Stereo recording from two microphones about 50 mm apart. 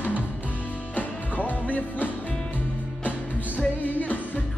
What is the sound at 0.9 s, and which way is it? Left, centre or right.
Music, left.